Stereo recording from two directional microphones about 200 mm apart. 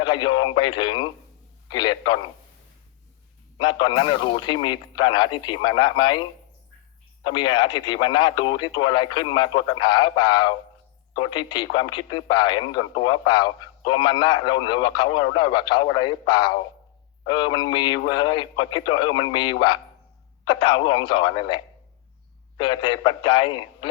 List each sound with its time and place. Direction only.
0.0 s a man's voice: 20° left (ahead or behind)
3.6 s a man's voice: 20° left (ahead or behind)
7.3 s a man's voice: 20° left (ahead or behind)